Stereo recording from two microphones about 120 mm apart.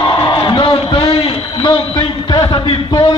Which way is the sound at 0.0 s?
35° left (ahead or behind).